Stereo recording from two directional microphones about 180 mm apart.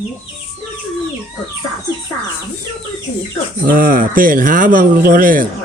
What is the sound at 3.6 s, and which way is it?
Speech, 55° right (ahead or behind).